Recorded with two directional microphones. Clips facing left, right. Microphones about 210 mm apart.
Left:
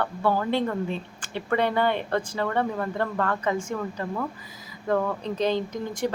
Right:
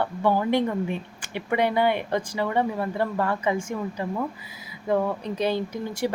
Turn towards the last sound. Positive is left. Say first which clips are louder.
# right 1 dB
turn(degrees=-10)  # may be behind; listen again after turning